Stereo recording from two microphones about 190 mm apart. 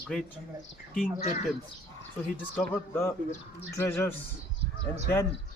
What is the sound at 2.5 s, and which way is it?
Speech, 10° left (ahead or behind).